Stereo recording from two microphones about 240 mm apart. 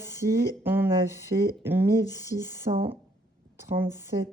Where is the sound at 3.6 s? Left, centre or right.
Centre.